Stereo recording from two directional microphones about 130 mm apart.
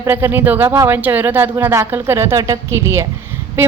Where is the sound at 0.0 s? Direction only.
15° right (ahead or behind).